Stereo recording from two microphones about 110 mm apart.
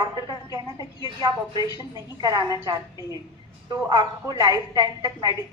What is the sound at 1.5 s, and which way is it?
Speech, 40° left (ahead or behind).